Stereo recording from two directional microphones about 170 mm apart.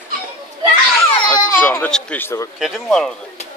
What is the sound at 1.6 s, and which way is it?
Speech, 10° left (ahead or behind).